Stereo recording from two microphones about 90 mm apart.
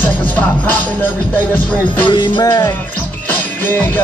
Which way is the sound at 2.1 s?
55° left (ahead or behind).